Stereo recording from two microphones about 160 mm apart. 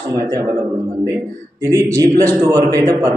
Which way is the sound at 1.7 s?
20° right (ahead or behind).